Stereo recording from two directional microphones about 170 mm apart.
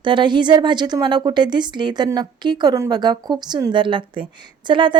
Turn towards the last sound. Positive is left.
turn(degrees=-30)  # may be behind; listen again after turning